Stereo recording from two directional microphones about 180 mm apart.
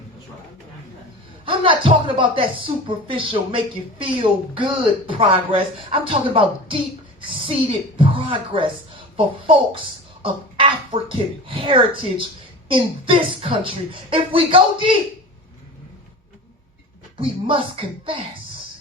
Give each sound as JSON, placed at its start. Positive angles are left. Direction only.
{"t": 1.5, "sound": "speech", "side_deg": -30}
{"t": 17.2, "sound": "speech", "side_deg": -30}